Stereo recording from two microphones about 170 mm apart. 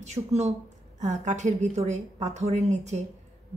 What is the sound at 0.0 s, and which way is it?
A woman's voice, 40° right (ahead or behind).